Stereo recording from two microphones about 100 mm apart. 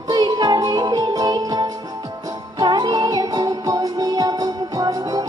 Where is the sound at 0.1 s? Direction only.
40° right (ahead or behind).